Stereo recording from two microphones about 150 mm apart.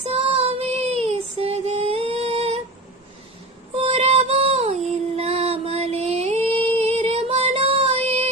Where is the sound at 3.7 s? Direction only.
45° right (ahead or behind).